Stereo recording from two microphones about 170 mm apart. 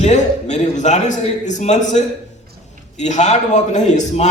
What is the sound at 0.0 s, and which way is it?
A man's voice, 45° left (ahead or behind).